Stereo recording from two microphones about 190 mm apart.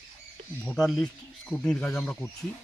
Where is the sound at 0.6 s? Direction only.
5° left (ahead or behind).